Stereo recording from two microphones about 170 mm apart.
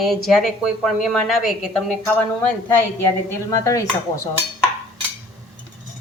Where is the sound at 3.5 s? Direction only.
20° left (ahead or behind).